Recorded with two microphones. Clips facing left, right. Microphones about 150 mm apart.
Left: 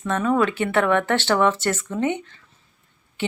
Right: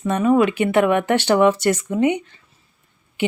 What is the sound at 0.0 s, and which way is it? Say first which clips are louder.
Speech: right 4 dB; 15° right (ahead or behind).